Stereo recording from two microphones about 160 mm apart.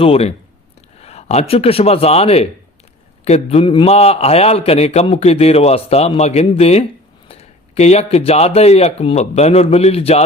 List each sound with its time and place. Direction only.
0.0 s a man's voice: 40° left (ahead or behind)